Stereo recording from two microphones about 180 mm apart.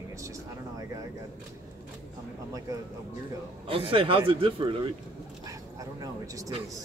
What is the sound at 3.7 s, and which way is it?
Speech, 30° right (ahead or behind).